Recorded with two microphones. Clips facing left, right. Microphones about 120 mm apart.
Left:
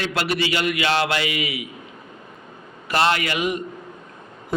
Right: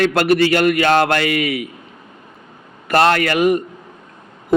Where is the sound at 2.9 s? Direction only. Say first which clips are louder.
Right 6 dB; 50° right (ahead or behind).